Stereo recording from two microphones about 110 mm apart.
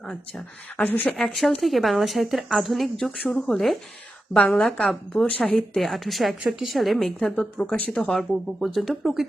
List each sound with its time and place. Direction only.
0.0 s speech: 5° left (ahead or behind)
0.8 s a woman's voice: 15° left (ahead or behind)
1.1 s a woman's voice: centre (ahead or behind)